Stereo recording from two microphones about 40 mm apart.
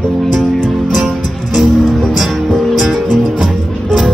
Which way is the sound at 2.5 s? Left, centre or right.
Centre.